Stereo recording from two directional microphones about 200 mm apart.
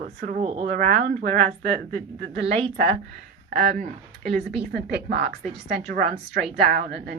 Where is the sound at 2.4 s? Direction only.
30° right (ahead or behind).